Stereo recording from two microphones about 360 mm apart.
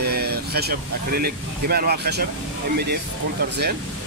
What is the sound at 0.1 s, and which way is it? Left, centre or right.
Speech, right.